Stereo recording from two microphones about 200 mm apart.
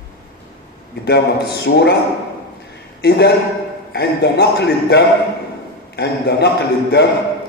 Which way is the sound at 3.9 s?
55° left (ahead or behind).